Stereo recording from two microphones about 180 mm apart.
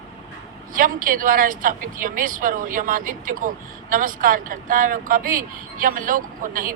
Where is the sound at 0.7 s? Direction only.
50° right (ahead or behind).